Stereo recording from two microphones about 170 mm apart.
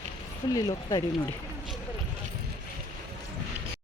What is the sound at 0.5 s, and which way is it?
Speech, 25° left (ahead or behind).